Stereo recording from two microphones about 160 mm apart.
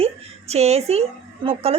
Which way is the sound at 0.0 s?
40° right (ahead or behind).